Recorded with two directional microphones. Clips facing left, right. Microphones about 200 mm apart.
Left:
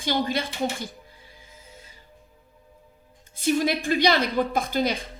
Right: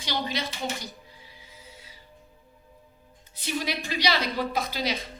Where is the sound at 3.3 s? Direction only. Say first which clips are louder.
Left 8 dB; 50° left (ahead or behind).